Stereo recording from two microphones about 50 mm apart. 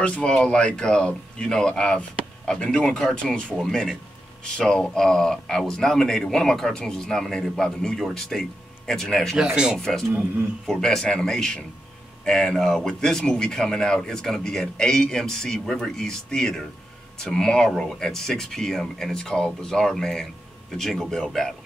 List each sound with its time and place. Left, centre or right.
0.0 s speech: left
4.4 s speech: centre
9.4 s speech: centre
9.8 s speech: centre